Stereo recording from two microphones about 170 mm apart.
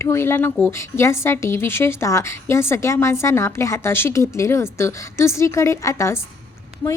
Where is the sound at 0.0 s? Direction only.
15° left (ahead or behind).